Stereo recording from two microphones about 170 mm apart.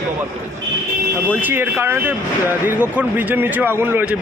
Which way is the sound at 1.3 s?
10° right (ahead or behind).